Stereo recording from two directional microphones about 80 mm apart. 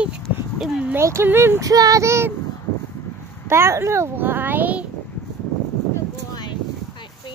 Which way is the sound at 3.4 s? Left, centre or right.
Right.